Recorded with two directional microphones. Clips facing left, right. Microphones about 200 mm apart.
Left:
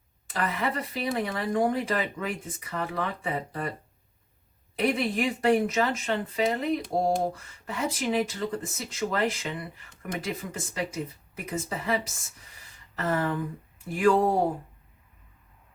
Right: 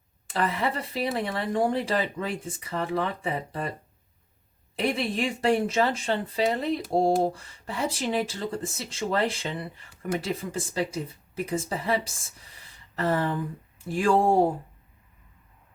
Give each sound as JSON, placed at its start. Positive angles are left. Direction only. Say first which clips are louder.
{"t": 0.3, "sound": "speech", "louder": "right 2 dB", "side_deg": -30}
{"t": 4.9, "sound": "speech", "louder": "left 1 dB", "side_deg": -30}